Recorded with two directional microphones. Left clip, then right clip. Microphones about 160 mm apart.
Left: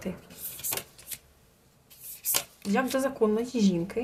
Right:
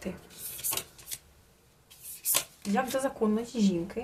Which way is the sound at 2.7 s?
30° left (ahead or behind).